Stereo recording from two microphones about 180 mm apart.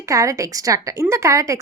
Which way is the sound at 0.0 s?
20° right (ahead or behind).